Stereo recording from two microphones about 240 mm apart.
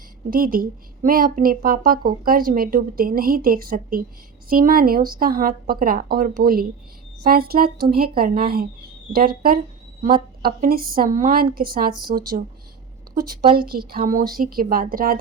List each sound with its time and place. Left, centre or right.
0.3 s a woman's voice: right